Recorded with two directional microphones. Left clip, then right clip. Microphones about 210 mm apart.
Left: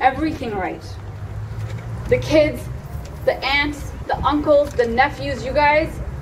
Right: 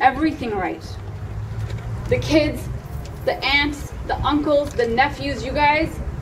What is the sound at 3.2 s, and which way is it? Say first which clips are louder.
A woman's voice: even; 25° right (ahead or behind).